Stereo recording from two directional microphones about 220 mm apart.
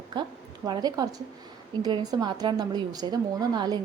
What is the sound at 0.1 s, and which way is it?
A woman's voice, 20° right (ahead or behind).